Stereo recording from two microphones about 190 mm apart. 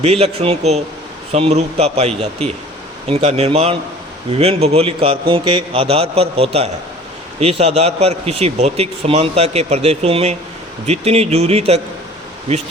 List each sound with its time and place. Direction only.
0.0 s a man's voice: 35° right (ahead or behind)